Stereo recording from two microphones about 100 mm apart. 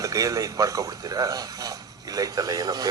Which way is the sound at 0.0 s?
35° right (ahead or behind).